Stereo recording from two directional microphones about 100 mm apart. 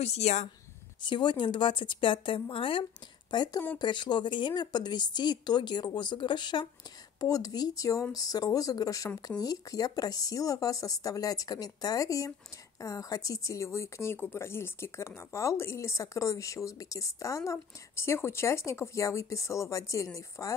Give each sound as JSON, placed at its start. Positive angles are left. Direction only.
{"t": 0.0, "sound": "a woman's voice", "side_deg": 90}
{"t": 1.0, "sound": "speech", "side_deg": 50}
{"t": 7.2, "sound": "speech", "side_deg": 35}